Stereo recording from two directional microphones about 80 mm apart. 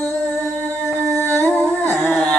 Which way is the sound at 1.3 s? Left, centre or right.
Left.